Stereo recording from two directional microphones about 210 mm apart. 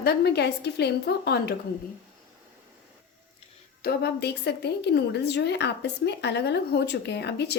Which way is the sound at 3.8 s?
50° left (ahead or behind).